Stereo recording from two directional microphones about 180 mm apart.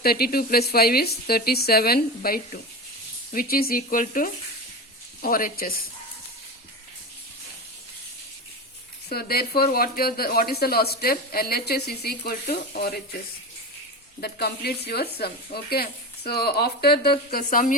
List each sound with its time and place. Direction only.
0.0 s speech: 60° left (ahead or behind)
9.0 s speech: 60° left (ahead or behind)
14.2 s speech: 60° left (ahead or behind)